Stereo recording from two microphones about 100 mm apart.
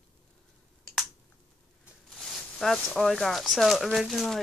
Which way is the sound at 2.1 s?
Centre (ahead or behind).